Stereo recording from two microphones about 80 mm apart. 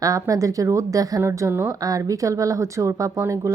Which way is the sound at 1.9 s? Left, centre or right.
Right.